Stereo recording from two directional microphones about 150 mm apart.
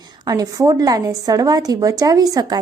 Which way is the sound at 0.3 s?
25° right (ahead or behind).